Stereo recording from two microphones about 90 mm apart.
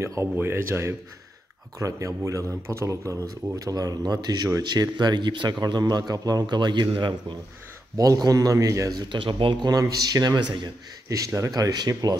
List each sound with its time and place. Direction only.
0.0 s speech: 30° right (ahead or behind); by 7.3 s 60° right (ahead or behind)
8.0 s speech: 45° right (ahead or behind)
9.1 s speech: 65° right (ahead or behind)
9.7 s speech: 45° right (ahead or behind)
11.1 s speech: 40° right (ahead or behind)